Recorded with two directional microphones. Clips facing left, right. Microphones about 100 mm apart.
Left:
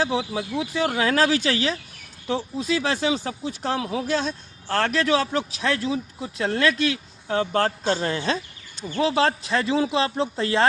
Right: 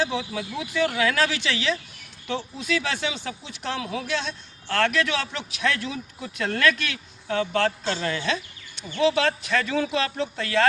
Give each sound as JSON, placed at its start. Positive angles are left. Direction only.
{"t": 0.0, "sound": "speech", "side_deg": 35}